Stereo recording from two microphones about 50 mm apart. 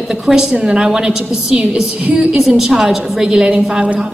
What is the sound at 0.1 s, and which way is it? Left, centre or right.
A woman's voice, centre.